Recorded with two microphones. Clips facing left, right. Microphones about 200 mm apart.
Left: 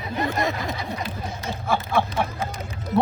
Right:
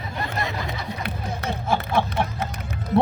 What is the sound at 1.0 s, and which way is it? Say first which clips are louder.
Speech: right 2 dB; 60° right (ahead or behind).